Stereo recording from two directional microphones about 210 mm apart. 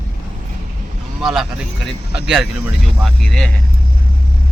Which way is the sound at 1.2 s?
Centre (ahead or behind).